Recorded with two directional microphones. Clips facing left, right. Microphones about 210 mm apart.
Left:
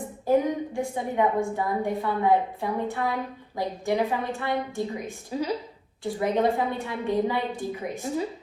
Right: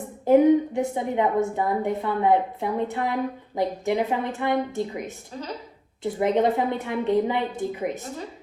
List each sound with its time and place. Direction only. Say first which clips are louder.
0.3 s a woman's voice: right 7 dB; 20° right (ahead or behind)
5.3 s speech: left 8 dB; 10° left (ahead or behind)
6.0 s a woman's voice: right 3 dB; 20° right (ahead or behind)